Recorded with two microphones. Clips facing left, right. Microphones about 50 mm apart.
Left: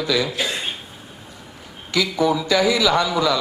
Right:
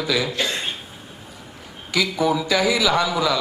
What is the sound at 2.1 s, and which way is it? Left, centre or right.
A man's voice, centre.